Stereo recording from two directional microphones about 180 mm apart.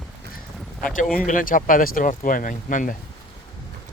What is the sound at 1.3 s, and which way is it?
Speech, 50° left (ahead or behind).